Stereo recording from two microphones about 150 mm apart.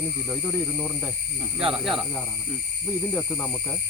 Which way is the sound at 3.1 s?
15° left (ahead or behind).